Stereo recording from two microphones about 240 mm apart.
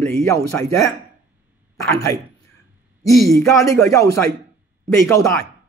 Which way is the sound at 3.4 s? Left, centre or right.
Centre.